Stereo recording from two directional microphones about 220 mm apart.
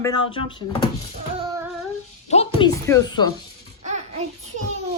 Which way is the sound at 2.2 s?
30° left (ahead or behind).